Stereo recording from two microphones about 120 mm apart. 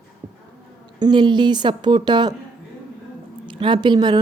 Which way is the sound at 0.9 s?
35° right (ahead or behind).